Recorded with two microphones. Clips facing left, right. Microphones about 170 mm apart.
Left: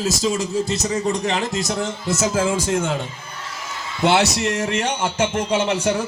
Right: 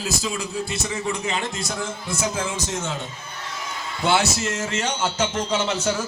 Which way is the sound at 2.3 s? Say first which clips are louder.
Left 8 dB; 50° left (ahead or behind).